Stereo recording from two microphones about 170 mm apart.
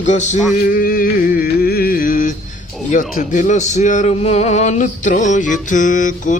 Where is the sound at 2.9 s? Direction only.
50° left (ahead or behind).